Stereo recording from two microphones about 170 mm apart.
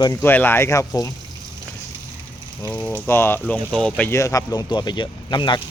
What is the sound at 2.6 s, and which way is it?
Speech, 10° left (ahead or behind).